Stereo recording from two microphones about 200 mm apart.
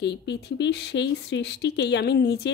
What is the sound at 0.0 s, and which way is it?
A woman's voice, 60° left (ahead or behind).